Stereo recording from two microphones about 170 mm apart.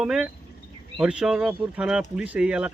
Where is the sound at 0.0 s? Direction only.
5° right (ahead or behind).